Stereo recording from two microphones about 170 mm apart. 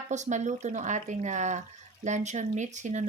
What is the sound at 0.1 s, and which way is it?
Speech, 45° right (ahead or behind).